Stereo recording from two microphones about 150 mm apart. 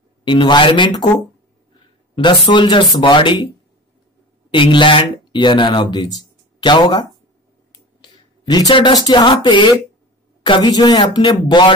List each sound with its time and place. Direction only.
0.2 s speech: 30° left (ahead or behind)
2.1 s speech: 30° left (ahead or behind)
4.5 s speech: 35° left (ahead or behind)